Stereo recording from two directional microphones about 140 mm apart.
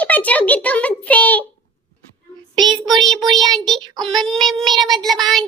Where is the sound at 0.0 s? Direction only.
10° left (ahead or behind).